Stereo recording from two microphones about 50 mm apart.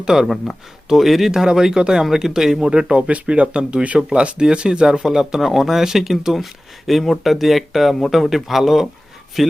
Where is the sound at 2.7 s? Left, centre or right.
Centre.